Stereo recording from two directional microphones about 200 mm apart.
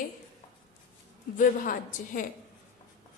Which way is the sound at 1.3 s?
40° left (ahead or behind).